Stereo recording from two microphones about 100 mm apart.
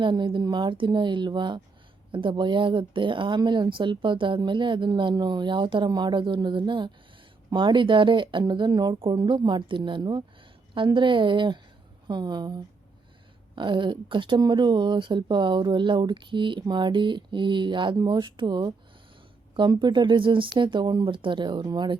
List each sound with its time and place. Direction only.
0.0 s a woman's voice: 50° right (ahead or behind)